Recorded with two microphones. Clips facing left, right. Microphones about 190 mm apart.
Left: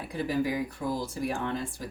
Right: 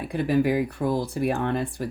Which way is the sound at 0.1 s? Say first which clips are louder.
Right 7 dB; 65° right (ahead or behind).